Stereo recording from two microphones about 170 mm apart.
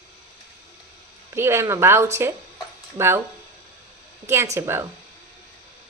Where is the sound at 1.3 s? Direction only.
15° right (ahead or behind).